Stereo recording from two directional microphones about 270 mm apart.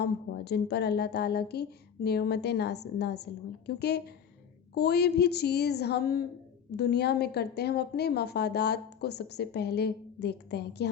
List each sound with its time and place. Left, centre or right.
0.0 s a woman's voice: left